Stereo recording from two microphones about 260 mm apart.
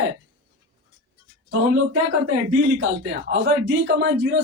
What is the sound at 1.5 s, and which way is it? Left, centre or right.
Speech, right.